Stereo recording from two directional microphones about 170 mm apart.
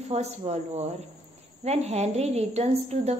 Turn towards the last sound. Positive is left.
turn(degrees=-40)  # may be behind; listen again after turning